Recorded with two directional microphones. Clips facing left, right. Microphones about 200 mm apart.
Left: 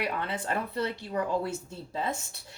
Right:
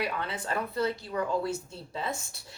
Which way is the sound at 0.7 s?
30° left (ahead or behind).